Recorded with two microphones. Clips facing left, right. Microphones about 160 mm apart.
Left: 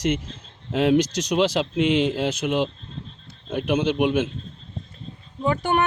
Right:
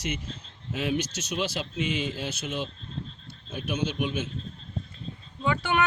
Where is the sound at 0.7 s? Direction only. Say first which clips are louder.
Left 10 dB; 70° left (ahead or behind).